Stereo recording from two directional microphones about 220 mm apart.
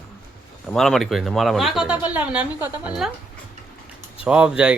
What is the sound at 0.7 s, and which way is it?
Speech, centre (ahead or behind).